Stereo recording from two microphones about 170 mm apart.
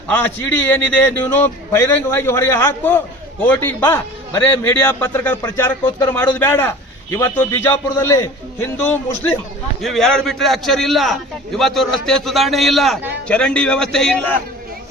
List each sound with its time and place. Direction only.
0.7 s a man's voice: 10° left (ahead or behind)
9.8 s a man's voice: centre (ahead or behind)